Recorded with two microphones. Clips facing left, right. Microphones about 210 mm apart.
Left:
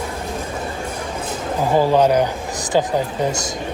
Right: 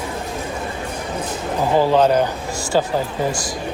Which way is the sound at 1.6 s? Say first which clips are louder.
Even; 15° left (ahead or behind).